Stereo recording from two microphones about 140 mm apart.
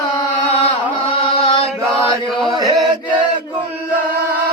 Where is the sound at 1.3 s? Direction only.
45° left (ahead or behind).